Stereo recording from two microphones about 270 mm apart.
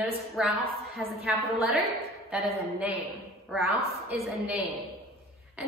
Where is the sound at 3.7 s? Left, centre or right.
Right.